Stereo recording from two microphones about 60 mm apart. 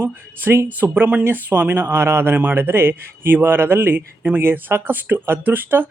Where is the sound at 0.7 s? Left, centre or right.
Right.